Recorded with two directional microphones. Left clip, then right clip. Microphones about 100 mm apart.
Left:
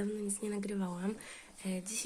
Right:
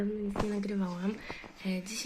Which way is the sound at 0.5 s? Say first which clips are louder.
Right 3 dB; 40° left (ahead or behind).